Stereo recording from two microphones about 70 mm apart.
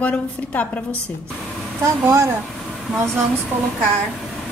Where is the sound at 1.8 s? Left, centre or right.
Right.